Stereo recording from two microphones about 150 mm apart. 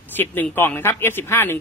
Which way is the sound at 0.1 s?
10° left (ahead or behind).